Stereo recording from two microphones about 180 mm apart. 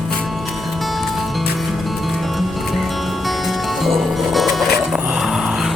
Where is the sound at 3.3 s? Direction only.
Centre (ahead or behind).